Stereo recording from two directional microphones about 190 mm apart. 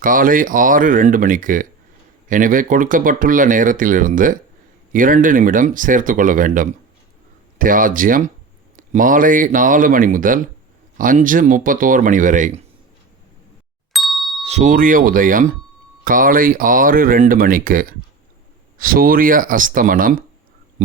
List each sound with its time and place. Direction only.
0.0 s speech: 45° right (ahead or behind)
13.9 s ding: centre (ahead or behind)
14.4 s speech: 40° right (ahead or behind)